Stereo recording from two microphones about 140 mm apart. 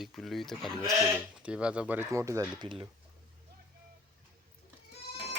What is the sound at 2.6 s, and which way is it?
Speech, 35° right (ahead or behind).